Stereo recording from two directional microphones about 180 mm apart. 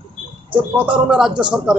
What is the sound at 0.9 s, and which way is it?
Speech, 5° right (ahead or behind).